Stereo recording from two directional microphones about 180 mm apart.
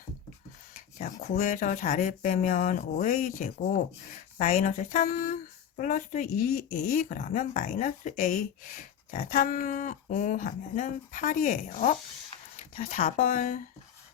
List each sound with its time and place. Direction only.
0.7 s speech: 50° left (ahead or behind)
12.5 s a sound: 35° left (ahead or behind)
12.9 s speech: 50° left (ahead or behind)